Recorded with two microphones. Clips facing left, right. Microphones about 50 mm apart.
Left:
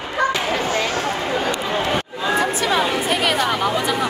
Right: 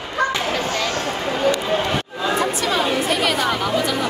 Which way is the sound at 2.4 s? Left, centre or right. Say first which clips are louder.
Left 2 dB; centre.